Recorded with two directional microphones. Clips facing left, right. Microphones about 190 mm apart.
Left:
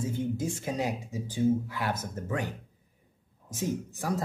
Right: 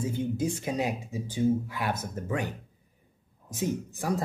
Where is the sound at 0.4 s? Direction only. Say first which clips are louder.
Right 2 dB; 15° right (ahead or behind).